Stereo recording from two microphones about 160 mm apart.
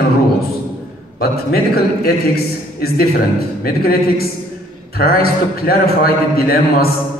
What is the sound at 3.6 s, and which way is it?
A man's voice, 70° left (ahead or behind).